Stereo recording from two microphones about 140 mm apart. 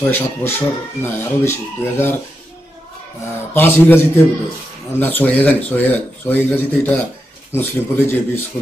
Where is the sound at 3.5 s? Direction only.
15° left (ahead or behind).